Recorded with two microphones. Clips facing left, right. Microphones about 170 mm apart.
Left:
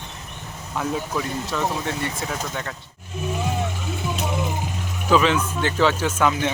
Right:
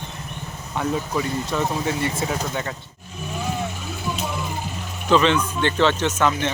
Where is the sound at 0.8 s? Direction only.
Centre (ahead or behind).